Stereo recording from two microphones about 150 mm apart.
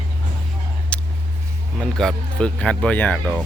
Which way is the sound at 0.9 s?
5° left (ahead or behind).